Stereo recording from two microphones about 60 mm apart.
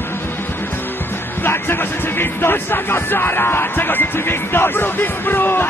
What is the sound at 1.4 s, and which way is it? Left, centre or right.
Speech, left.